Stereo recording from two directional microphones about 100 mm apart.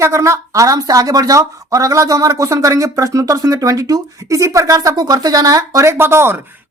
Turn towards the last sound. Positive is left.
turn(degrees=-25)  # may be behind; listen again after turning